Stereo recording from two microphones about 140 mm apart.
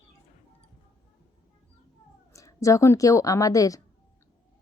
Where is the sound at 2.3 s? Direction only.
20° left (ahead or behind).